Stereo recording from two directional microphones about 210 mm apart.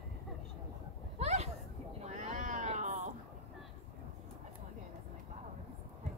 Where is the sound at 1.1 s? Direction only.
30° right (ahead or behind).